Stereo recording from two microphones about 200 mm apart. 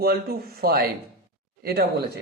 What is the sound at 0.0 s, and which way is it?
Speech, 50° right (ahead or behind).